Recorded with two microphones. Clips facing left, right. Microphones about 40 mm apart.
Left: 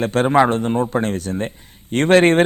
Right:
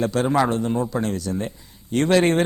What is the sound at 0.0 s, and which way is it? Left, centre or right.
A man's voice, left.